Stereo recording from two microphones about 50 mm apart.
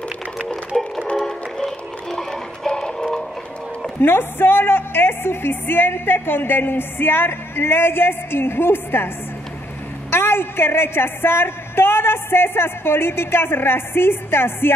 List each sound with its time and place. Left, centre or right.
0.5 s music: centre
4.0 s a woman's voice: left
10.1 s a woman's voice: left